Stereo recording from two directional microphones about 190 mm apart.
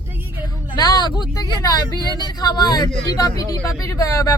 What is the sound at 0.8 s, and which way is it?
Speech, 20° left (ahead or behind).